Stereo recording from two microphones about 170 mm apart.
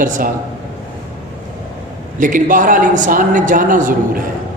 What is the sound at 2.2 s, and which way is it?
A man's voice, 50° right (ahead or behind).